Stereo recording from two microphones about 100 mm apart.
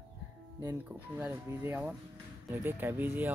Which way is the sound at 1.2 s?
20° right (ahead or behind).